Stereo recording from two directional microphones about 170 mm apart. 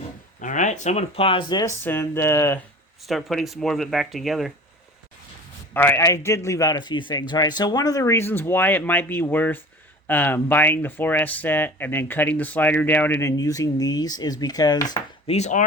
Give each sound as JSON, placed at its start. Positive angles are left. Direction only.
{"t": 0.4, "sound": "speech", "side_deg": 45}
{"t": 1.8, "sound": "speech", "side_deg": 15}
{"t": 3.0, "sound": "speech", "side_deg": 0}
{"t": 5.7, "sound": "a man's voice", "side_deg": 10}
{"t": 15.3, "sound": "speech", "side_deg": 45}